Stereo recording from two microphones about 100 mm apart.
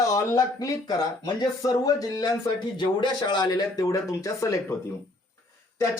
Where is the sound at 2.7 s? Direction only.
50° left (ahead or behind); by 4.8 s 30° left (ahead or behind).